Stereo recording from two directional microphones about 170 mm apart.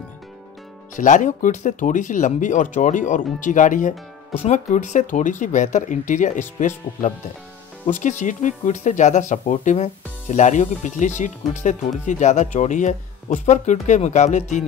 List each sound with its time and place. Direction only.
0.9 s speech: 50° left (ahead or behind)
7.8 s speech: 45° left (ahead or behind)